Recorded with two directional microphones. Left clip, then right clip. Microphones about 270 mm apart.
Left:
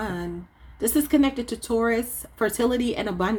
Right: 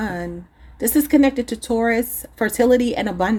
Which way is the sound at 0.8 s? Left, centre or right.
Right.